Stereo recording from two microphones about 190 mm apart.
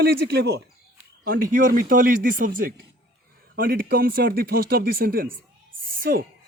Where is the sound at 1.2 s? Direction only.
45° right (ahead or behind).